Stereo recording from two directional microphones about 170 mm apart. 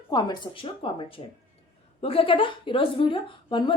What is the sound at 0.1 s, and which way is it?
A woman's voice, 25° left (ahead or behind).